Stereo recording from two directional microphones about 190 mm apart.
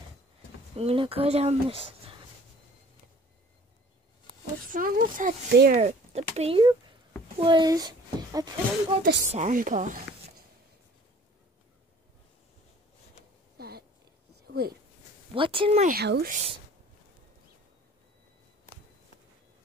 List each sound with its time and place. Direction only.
0.7 s speech: 30° right (ahead or behind)
4.7 s a woman's voice: 45° right (ahead or behind)
5.5 s speech: 60° right (ahead or behind)
5.8 s speech: 35° right (ahead or behind); by 8.5 s 20° right (ahead or behind)
9.0 s a woman's voice: 40° right (ahead or behind)
13.6 s a sound: 55° right (ahead or behind)
14.5 s speech: 55° right (ahead or behind)
15.3 s speech: 25° right (ahead or behind)
15.8 s a woman's voice: 55° right (ahead or behind)